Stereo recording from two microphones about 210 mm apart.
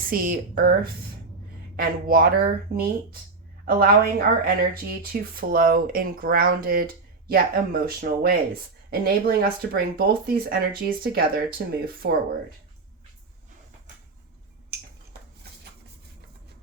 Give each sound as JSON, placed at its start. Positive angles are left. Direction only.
{"t": 0.1, "sound": "speech", "side_deg": -40}